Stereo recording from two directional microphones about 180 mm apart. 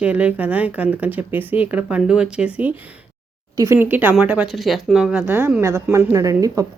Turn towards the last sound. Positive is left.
turn(degrees=-20)  # may be behind; listen again after turning